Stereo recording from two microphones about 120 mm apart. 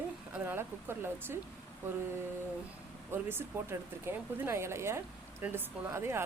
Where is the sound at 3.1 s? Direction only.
20° right (ahead or behind).